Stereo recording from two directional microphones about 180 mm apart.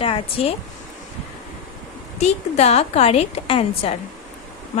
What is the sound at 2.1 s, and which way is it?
A woman's voice, 40° left (ahead or behind).